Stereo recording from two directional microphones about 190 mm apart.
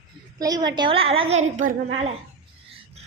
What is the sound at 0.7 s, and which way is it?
A woman's voice, 25° right (ahead or behind).